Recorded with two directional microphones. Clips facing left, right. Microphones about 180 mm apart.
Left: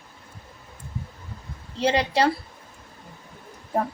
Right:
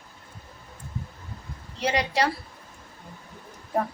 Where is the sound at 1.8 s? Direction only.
30° left (ahead or behind).